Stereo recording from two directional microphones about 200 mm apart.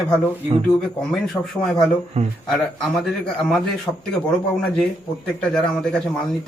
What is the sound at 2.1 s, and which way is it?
Speech, 30° right (ahead or behind).